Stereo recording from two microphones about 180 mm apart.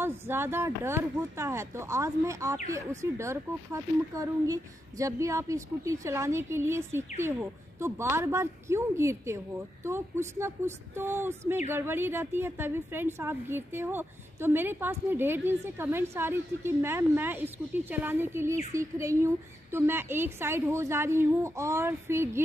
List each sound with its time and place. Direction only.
0.0 s speech: 10° right (ahead or behind)